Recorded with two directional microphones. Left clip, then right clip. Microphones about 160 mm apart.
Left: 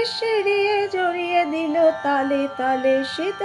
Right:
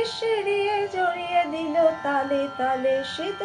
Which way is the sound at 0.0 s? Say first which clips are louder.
Left 4 dB; 40° left (ahead or behind).